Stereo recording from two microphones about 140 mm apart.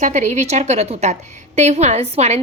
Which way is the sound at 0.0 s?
60° right (ahead or behind).